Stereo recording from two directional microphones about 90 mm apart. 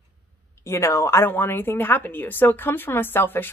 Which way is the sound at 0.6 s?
30° left (ahead or behind).